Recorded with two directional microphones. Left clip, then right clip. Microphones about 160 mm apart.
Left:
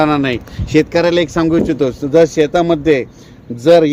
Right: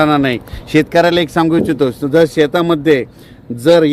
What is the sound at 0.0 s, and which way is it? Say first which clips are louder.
A man's voice: right 1 dB; 60° right (ahead or behind).